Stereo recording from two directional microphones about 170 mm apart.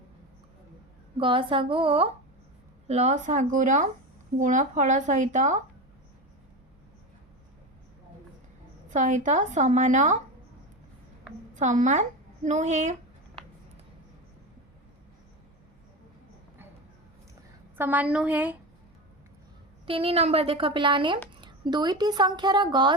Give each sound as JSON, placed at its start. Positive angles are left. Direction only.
{"t": 1.2, "sound": "a woman's voice", "side_deg": -30}
{"t": 8.9, "sound": "speech", "side_deg": -45}
{"t": 11.5, "sound": "a woman's voice", "side_deg": -50}
{"t": 17.7, "sound": "a woman's voice", "side_deg": -10}
{"t": 19.8, "sound": "a woman's voice", "side_deg": -35}